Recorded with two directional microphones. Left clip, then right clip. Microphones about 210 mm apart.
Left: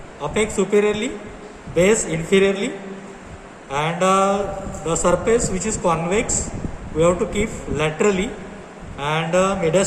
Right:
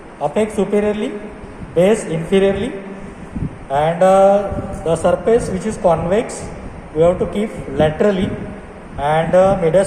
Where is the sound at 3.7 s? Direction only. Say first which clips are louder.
Right 6 dB; 30° left (ahead or behind).